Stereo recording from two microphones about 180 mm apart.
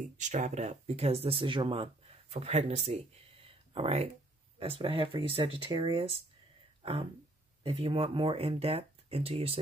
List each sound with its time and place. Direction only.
0.2 s speech: 40° right (ahead or behind)
6.8 s a sound: 30° right (ahead or behind)
7.6 s speech: 30° right (ahead or behind)